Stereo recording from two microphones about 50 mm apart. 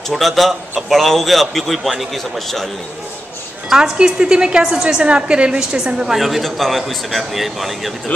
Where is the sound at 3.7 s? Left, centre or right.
Centre.